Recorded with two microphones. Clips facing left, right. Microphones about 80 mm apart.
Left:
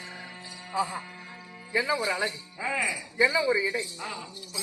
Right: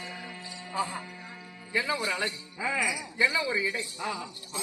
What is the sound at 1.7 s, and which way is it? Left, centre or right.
Music, centre.